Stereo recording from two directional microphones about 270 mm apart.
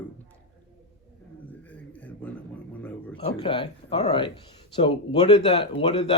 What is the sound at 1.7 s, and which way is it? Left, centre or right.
Speech, centre.